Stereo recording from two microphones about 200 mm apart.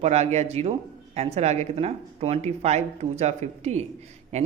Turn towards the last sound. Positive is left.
turn(degrees=-30)  # may be behind; listen again after turning